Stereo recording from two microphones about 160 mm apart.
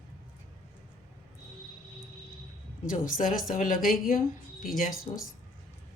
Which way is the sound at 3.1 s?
60° left (ahead or behind).